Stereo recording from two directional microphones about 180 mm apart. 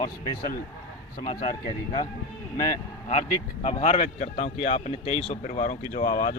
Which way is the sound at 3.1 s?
35° left (ahead or behind).